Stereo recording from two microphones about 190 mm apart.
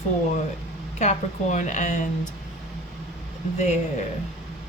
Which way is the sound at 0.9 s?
40° left (ahead or behind).